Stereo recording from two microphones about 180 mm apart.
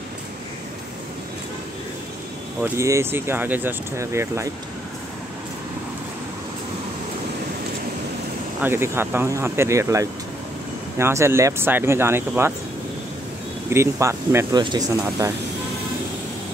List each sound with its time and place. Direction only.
2.6 s speech: 15° right (ahead or behind)
8.5 s speech: 10° right (ahead or behind)
13.7 s speech: 15° right (ahead or behind)